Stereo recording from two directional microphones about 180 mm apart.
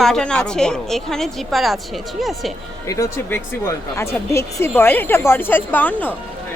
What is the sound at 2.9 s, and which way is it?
Speech, 15° left (ahead or behind).